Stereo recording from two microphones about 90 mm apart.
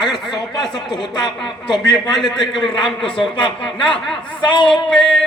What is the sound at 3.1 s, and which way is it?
Speech, 70° left (ahead or behind).